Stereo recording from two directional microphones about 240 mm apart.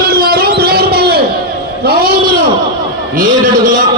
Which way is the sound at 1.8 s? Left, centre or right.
Right.